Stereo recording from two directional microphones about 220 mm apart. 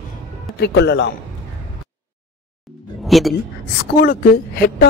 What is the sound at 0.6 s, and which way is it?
Speech, 50° left (ahead or behind).